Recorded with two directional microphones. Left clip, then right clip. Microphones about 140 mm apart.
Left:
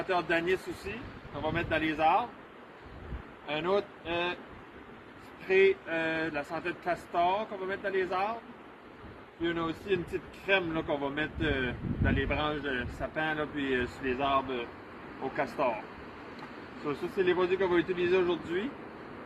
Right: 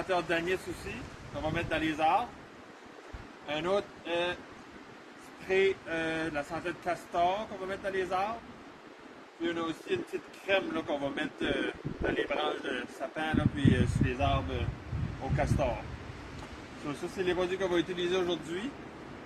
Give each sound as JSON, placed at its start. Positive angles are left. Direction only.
{"t": 0.1, "sound": "speech", "side_deg": -20}
{"t": 3.4, "sound": "speech", "side_deg": -20}
{"t": 5.5, "sound": "speech", "side_deg": -20}
{"t": 9.4, "sound": "speech", "side_deg": -20}
{"t": 16.8, "sound": "speech", "side_deg": -20}